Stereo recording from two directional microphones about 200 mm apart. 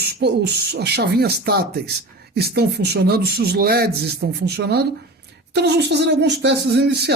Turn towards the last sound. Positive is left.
turn(degrees=-55)  # may be behind; listen again after turning